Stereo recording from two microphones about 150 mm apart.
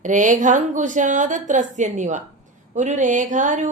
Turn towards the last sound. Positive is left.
turn(degrees=-55)  # may be behind; listen again after turning